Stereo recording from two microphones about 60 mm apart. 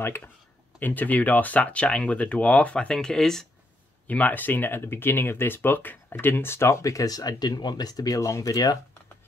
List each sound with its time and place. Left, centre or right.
0.0 s speech: left; by 3.4 s centre
4.1 s speech: left
6.8 s speech: left